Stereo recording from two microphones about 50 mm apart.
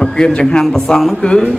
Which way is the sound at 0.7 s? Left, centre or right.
Centre.